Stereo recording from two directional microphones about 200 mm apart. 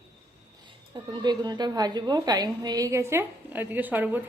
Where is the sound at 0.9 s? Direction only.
20° right (ahead or behind).